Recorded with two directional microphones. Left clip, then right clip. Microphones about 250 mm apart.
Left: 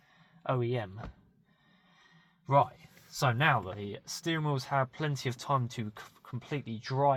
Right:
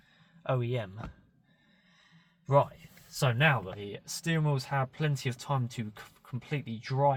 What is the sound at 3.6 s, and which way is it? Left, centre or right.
Speech, left.